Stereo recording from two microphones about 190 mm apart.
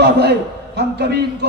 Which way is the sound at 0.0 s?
60° right (ahead or behind).